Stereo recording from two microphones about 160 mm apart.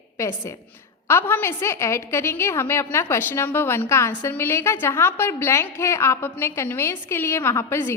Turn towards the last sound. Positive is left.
turn(degrees=15)  # may be behind; listen again after turning